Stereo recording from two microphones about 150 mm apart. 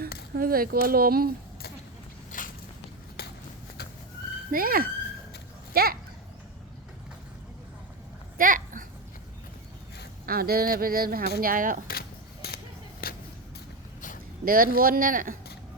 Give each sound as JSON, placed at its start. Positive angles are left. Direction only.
{"t": 0.3, "sound": "speech", "side_deg": -75}
{"t": 2.3, "sound": "walk", "side_deg": 60}
{"t": 3.2, "sound": "a sound", "side_deg": 90}
{"t": 4.5, "sound": "speech", "side_deg": -75}
{"t": 5.7, "sound": "speech", "side_deg": -90}
{"t": 8.4, "sound": "a sound", "side_deg": -65}
{"t": 10.2, "sound": "speech", "side_deg": -90}
{"t": 11.3, "sound": "speech", "side_deg": -70}
{"t": 11.9, "sound": "a sound", "side_deg": 90}
{"t": 13.0, "sound": "vehicle", "side_deg": 80}
{"t": 14.4, "sound": "speech", "side_deg": -75}